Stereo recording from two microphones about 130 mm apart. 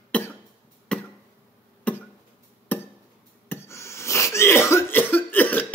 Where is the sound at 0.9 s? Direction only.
5° left (ahead or behind).